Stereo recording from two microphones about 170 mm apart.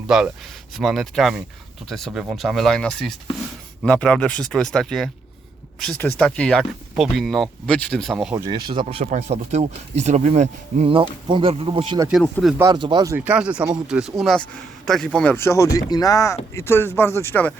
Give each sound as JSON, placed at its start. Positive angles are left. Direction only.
{"t": 0.8, "sound": "speech", "side_deg": 0}
{"t": 8.4, "sound": "speech", "side_deg": -25}
{"t": 9.0, "sound": "speech", "side_deg": -40}
{"t": 12.2, "sound": "speech", "side_deg": 0}
{"t": 12.5, "sound": "speech", "side_deg": -25}
{"t": 13.1, "sound": "speech", "side_deg": -10}